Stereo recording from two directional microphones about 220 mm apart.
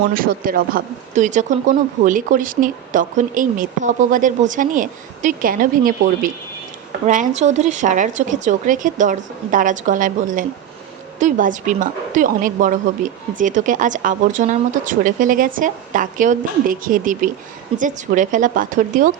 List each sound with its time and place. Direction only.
0.1 s a woman's voice: 40° right (ahead or behind)